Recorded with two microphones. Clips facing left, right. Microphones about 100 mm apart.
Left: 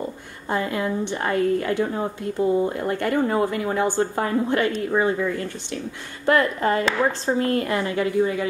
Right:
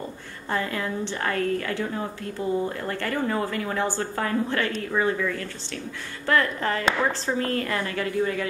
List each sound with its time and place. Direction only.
0.5 s speech: 20° left (ahead or behind)